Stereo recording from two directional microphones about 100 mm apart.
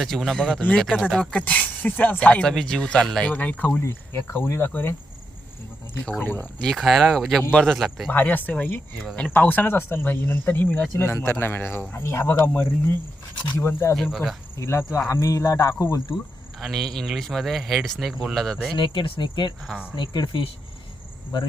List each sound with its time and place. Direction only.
0.0 s speech: centre (ahead or behind); by 4.9 s 20° left (ahead or behind)
6.0 s speech: 15° left (ahead or behind)
6.6 s speech: 5° left (ahead or behind)
8.1 s speech: 20° left (ahead or behind)
13.9 s speech: centre (ahead or behind)
14.6 s speech: 25° left (ahead or behind)
16.1 s speech: centre (ahead or behind)
18.8 s speech: 60° left (ahead or behind)